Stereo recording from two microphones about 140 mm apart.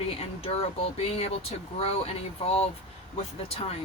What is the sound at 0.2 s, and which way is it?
Speech, 45° left (ahead or behind).